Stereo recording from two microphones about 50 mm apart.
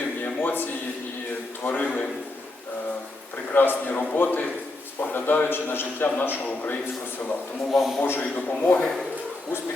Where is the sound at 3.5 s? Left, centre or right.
Left.